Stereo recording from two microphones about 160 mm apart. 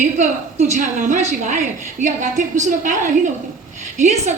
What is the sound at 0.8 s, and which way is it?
A woman's voice, 50° right (ahead or behind).